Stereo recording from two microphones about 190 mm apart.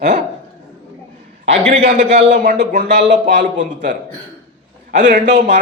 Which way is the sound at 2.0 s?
30° right (ahead or behind).